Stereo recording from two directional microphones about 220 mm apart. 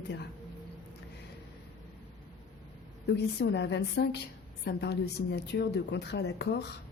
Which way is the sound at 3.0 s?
50° left (ahead or behind).